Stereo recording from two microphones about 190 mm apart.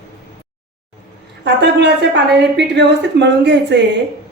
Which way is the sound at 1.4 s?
65° right (ahead or behind).